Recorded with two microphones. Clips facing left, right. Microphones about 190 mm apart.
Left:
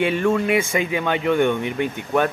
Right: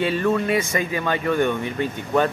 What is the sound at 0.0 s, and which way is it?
Speech, 15° left (ahead or behind).